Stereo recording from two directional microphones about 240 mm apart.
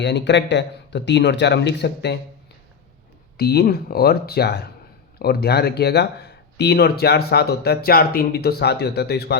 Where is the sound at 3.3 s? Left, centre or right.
Left.